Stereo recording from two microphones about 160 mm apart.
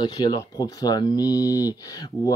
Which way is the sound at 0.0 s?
25° left (ahead or behind).